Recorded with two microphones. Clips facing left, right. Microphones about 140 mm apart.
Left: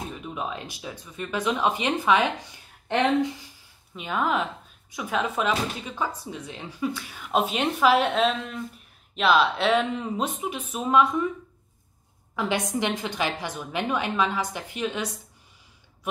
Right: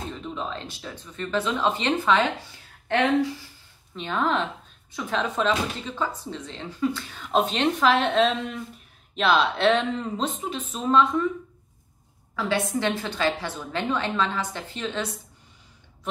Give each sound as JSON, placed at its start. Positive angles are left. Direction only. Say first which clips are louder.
{"t": 0.1, "sound": "speech", "louder": "even", "side_deg": 10}
{"t": 3.9, "sound": "speech", "louder": "right 1 dB", "side_deg": 10}
{"t": 12.4, "sound": "speech", "louder": "right 1 dB", "side_deg": 15}